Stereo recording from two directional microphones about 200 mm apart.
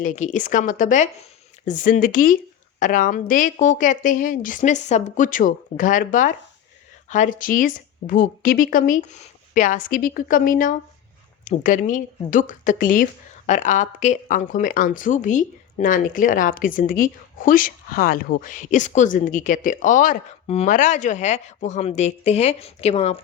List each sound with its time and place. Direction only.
0.0 s a woman's voice: 40° left (ahead or behind)